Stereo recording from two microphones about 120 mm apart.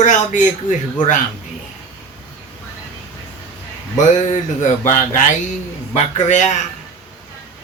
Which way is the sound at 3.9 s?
90° left.